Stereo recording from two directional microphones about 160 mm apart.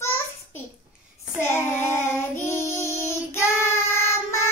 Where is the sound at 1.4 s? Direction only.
15° left (ahead or behind).